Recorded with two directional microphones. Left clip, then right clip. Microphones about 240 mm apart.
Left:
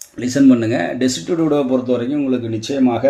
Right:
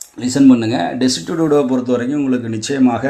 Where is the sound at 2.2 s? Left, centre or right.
Right.